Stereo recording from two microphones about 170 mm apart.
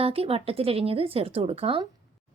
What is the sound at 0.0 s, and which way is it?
Speech, 35° right (ahead or behind).